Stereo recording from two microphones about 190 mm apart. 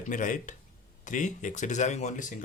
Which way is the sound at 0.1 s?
40° left (ahead or behind).